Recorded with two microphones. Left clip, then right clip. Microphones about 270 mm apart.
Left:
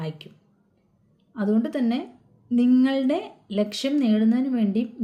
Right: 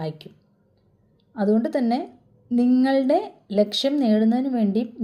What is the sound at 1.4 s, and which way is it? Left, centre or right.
A woman's voice, centre.